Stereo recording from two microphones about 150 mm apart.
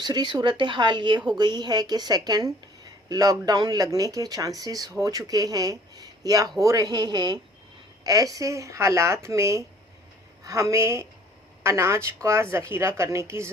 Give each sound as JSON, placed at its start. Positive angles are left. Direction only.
{"t": 0.0, "sound": "a woman's voice", "side_deg": -30}